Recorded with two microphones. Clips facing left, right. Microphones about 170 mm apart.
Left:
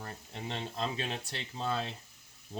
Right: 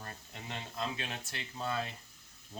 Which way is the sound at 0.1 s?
30° left (ahead or behind).